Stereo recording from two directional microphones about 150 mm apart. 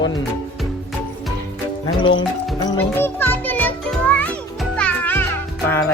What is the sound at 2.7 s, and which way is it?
Music, 10° left (ahead or behind).